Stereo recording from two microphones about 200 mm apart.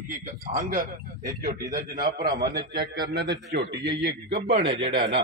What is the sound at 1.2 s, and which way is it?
Speech, 15° right (ahead or behind).